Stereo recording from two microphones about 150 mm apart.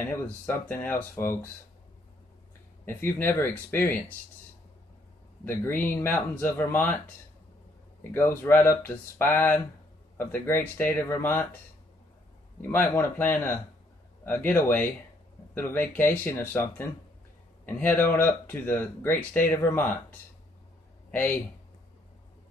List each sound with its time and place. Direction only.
0.0 s speech: 15° left (ahead or behind)
2.8 s speech: 15° left (ahead or behind)
5.4 s speech: 15° left (ahead or behind)
8.1 s speech: 15° left (ahead or behind)
12.6 s speech: 15° left (ahead or behind)